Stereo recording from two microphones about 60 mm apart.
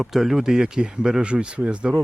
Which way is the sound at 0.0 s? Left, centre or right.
Centre.